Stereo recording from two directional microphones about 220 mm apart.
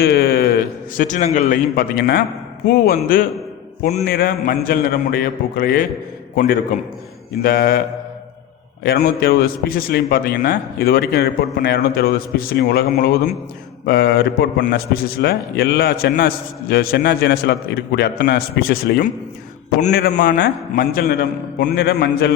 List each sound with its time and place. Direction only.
0.0 s a sound: 45° left (ahead or behind)
0.9 s a man's voice: 35° left (ahead or behind)
8.8 s a man's voice: 45° left (ahead or behind)